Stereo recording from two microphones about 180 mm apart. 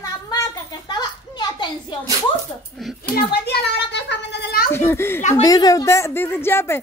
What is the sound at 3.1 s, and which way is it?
Children playing, 65° left (ahead or behind).